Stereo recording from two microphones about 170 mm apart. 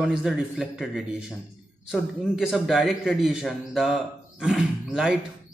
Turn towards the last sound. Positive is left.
turn(degrees=-5)  # may be behind; listen again after turning